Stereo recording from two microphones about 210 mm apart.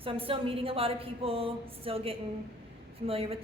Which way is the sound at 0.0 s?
25° right (ahead or behind).